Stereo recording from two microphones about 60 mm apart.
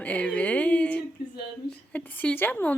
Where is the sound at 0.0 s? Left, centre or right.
Left.